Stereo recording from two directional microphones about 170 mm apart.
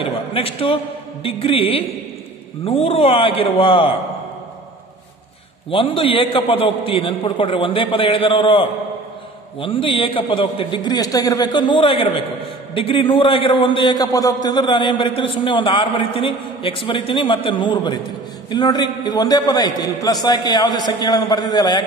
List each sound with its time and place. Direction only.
0.0 s a man's voice: 30° left (ahead or behind)
5.7 s a man's voice: 30° left (ahead or behind)